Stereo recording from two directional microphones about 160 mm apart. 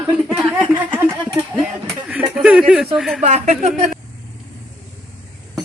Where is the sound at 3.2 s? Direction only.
45° right (ahead or behind).